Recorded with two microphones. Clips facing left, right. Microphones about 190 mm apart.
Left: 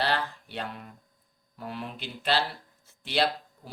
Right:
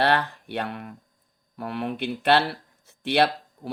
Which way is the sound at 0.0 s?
65° right (ahead or behind).